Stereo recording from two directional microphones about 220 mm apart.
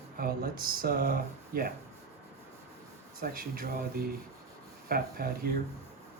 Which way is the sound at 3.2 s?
40° right (ahead or behind).